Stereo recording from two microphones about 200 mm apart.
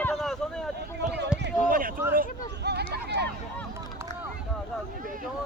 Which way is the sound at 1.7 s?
45° right (ahead or behind).